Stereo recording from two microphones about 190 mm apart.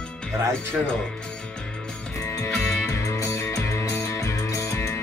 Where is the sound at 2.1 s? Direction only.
15° left (ahead or behind).